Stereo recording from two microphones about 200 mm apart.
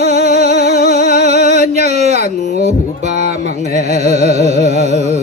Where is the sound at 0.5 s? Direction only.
55° left (ahead or behind).